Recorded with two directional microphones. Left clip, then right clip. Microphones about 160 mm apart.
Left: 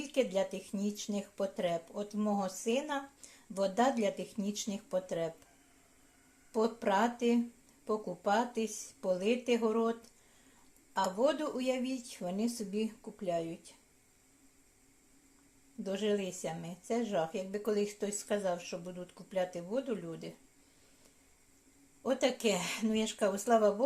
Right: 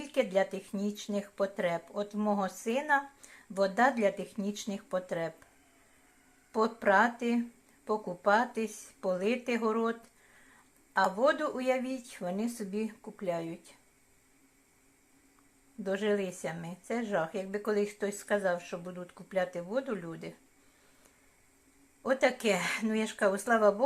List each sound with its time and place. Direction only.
0.0 s a sound: 5° right (ahead or behind)
0.7 s speech: 5° right (ahead or behind)
6.5 s speech: 5° right (ahead or behind)
10.9 s speech: 5° right (ahead or behind)
15.8 s speech: 5° right (ahead or behind)
22.0 s speech: 10° right (ahead or behind)